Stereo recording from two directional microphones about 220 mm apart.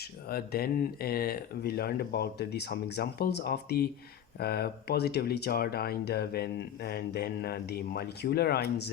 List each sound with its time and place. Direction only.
0.0 s speech: 45° left (ahead or behind)